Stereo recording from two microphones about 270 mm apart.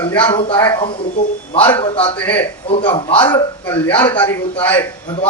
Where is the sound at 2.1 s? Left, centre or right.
Centre.